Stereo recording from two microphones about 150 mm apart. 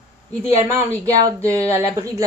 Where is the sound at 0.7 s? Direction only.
20° right (ahead or behind).